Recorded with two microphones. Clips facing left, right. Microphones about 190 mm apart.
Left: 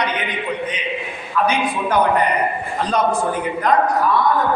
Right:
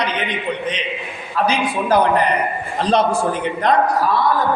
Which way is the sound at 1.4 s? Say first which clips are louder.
Right 2 dB; 35° right (ahead or behind).